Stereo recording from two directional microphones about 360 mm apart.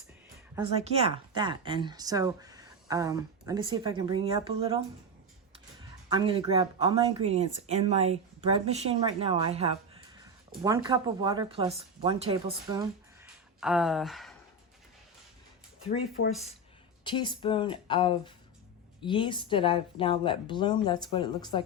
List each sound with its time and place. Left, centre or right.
0.9 s speech: centre
6.1 s speech: centre
13.6 s speech: centre
17.0 s speech: centre